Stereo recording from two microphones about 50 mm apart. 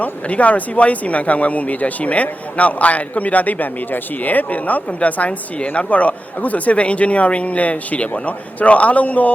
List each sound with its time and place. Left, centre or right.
0.0 s speech: left